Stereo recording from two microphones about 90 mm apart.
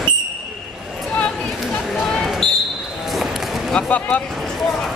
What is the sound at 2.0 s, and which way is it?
Basketball bounce, 5° left (ahead or behind).